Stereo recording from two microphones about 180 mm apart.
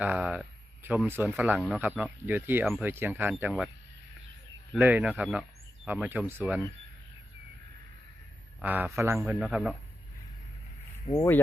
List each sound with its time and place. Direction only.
0.0 s speech: 10° right (ahead or behind)
4.8 s speech: 10° right (ahead or behind)
8.6 s speech: 10° right (ahead or behind)
11.0 s speech: 30° left (ahead or behind)